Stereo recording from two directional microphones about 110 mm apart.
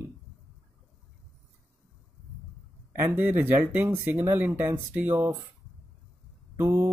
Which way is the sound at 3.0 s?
15° right (ahead or behind).